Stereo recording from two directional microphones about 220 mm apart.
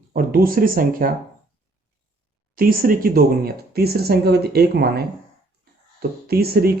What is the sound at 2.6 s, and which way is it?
Speech, 40° right (ahead or behind).